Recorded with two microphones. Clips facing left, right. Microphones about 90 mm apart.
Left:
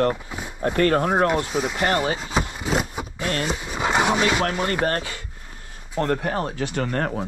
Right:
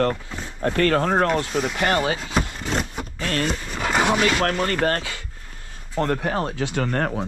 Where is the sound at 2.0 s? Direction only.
10° left (ahead or behind).